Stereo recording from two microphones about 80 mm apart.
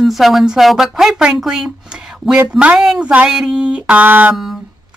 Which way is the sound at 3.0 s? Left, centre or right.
Centre.